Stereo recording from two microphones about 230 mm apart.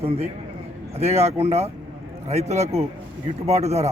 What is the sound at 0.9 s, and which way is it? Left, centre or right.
A man's voice, right.